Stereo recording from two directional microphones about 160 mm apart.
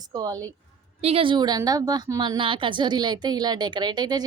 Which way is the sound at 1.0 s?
35° right (ahead or behind).